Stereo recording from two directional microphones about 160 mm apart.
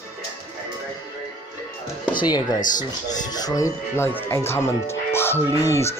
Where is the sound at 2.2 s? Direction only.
25° left (ahead or behind).